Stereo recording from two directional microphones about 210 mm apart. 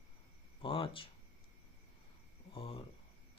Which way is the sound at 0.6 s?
25° left (ahead or behind).